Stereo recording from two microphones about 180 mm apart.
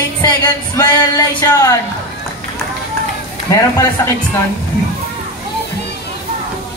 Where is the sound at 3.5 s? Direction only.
15° left (ahead or behind).